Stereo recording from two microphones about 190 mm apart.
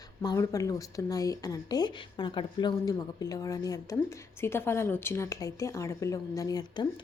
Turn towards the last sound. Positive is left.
turn(degrees=20)  # may be behind; listen again after turning